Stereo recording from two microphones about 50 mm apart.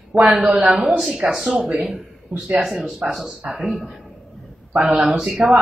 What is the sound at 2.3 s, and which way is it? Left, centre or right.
Speech, centre.